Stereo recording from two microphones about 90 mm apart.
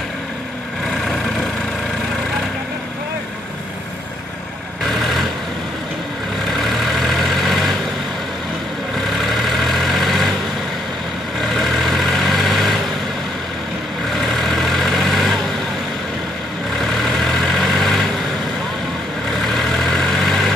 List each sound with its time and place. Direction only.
1.0 s vehicle: centre (ahead or behind)
6.6 s vehicle: centre (ahead or behind)
9.2 s vehicle: centre (ahead or behind)
11.4 s vehicle: centre (ahead or behind)
14.1 s vehicle: centre (ahead or behind)
16.8 s vehicle: centre (ahead or behind)
19.5 s vehicle: centre (ahead or behind)